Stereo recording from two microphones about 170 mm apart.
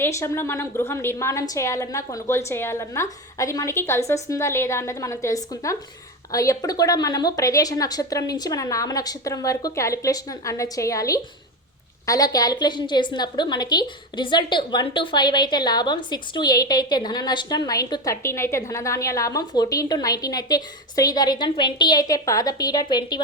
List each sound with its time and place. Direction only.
0.0 s a woman's voice: 15° left (ahead or behind)